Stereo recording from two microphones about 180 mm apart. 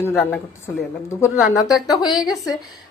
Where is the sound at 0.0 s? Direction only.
10° left (ahead or behind).